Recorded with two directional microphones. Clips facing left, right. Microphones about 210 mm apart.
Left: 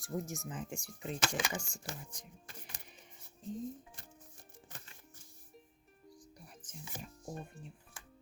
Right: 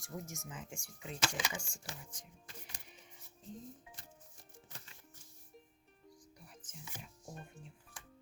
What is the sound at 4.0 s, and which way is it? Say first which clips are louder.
Music: left 2 dB; 55° left (ahead or behind).